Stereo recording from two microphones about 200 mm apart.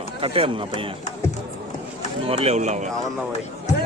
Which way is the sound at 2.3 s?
30° right (ahead or behind).